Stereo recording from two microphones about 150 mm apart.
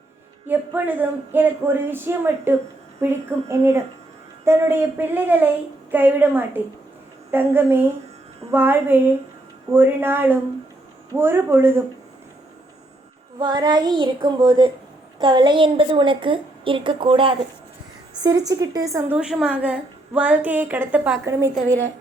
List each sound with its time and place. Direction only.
0.4 s a woman's voice: 10° right (ahead or behind)
13.4 s female singing: 30° right (ahead or behind)
15.2 s a woman's voice: 30° right (ahead or behind)
18.2 s female singing: 25° right (ahead or behind)
19.1 s a woman's voice: 5° right (ahead or behind)